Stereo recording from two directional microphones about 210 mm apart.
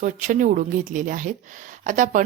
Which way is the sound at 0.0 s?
35° right (ahead or behind).